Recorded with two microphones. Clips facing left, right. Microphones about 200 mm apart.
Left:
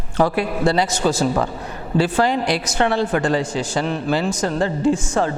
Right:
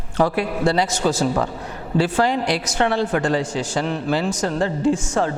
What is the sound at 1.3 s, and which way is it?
A woman's voice, 25° left (ahead or behind).